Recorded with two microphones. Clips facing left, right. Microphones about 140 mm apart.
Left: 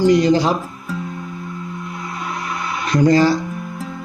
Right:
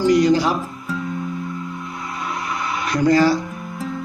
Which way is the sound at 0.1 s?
25° left (ahead or behind).